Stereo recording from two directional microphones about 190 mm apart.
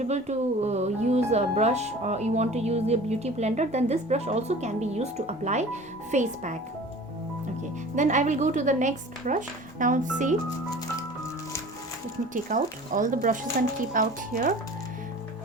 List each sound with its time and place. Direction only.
0.0 s speech: 35° right (ahead or behind)
7.9 s speech: 40° right (ahead or behind)
12.3 s speech: 45° right (ahead or behind)